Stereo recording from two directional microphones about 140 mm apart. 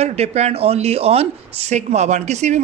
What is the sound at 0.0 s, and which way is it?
Speech, 50° right (ahead or behind).